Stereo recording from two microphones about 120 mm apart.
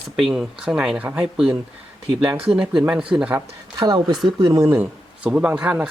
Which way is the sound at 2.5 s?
5° right (ahead or behind).